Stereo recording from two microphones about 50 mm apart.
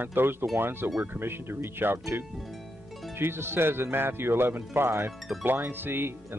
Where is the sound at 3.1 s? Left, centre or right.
Right.